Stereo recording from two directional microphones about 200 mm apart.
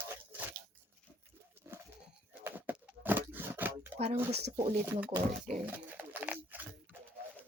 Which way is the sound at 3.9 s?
30° right (ahead or behind).